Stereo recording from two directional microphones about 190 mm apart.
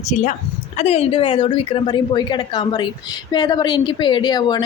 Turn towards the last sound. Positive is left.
turn(degrees=20)  # may be behind; listen again after turning